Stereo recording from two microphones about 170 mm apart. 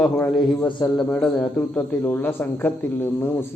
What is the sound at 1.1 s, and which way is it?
A man's voice, 10° left (ahead or behind).